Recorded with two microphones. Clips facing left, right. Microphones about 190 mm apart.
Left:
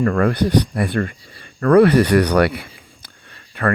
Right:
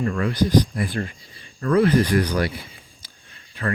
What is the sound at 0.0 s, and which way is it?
Speech, 60° left (ahead or behind).